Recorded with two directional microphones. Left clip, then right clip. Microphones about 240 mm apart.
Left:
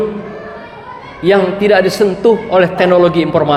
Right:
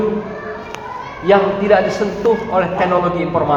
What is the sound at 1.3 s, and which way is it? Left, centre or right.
A man's voice, left.